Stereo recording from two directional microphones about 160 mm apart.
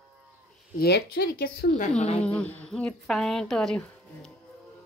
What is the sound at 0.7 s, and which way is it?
Speech, 80° left.